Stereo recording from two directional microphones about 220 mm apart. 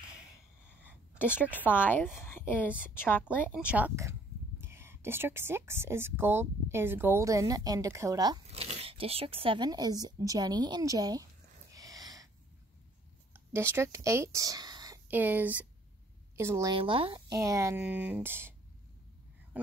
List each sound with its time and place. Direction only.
1.3 s speech: 10° left (ahead or behind)
3.6 s speech: 5° right (ahead or behind)
8.5 s speech: 30° right (ahead or behind)
11.7 s snort: 15° right (ahead or behind)
13.3 s speech: 10° right (ahead or behind)
17.4 s speech: 15° right (ahead or behind)
19.5 s speech: 5° right (ahead or behind)